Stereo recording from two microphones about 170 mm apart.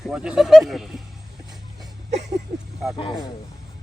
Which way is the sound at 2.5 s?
35° right (ahead or behind).